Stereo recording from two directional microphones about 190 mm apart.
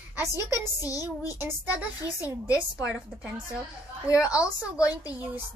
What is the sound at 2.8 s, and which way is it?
A woman's voice, 5° right (ahead or behind).